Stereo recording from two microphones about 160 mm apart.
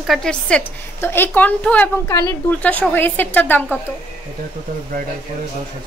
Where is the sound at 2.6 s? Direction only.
10° left (ahead or behind).